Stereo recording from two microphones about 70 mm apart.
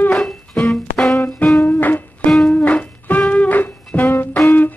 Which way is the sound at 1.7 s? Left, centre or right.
Left.